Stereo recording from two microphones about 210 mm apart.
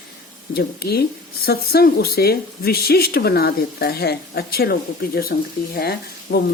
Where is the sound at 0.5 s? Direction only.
50° left (ahead or behind).